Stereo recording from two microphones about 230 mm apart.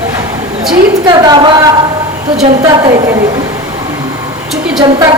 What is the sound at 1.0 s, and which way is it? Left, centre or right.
Speech, centre.